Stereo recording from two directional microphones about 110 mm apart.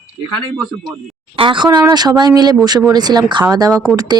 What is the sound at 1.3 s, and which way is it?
Speech, 50° right (ahead or behind).